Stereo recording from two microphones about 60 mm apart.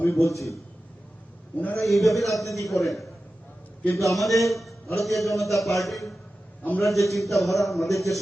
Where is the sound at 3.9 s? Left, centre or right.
Left.